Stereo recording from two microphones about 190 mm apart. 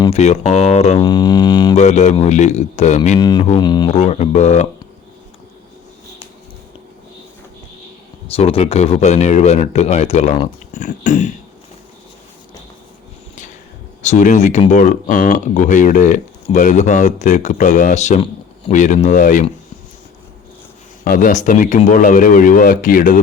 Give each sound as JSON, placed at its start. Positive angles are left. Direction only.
{"t": 0.1, "sound": "speech", "side_deg": 35}
{"t": 0.9, "sound": "didgeridoo", "side_deg": 20}
{"t": 1.7, "sound": "speech", "side_deg": 35}
{"t": 3.2, "sound": "didgeridoo", "side_deg": 25}
{"t": 3.9, "sound": "speech", "side_deg": 35}
{"t": 8.3, "sound": "speech", "side_deg": 30}
{"t": 10.8, "sound": "speech", "side_deg": 45}
{"t": 14.0, "sound": "speech", "side_deg": 40}
{"t": 21.0, "sound": "speech", "side_deg": 45}